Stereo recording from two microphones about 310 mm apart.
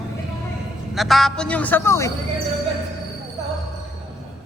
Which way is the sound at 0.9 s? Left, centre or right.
Centre.